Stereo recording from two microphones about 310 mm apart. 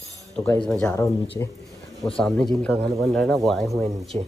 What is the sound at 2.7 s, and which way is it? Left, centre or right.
Speech, centre.